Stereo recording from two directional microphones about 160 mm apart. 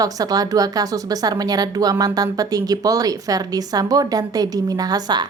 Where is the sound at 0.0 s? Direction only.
20° right (ahead or behind).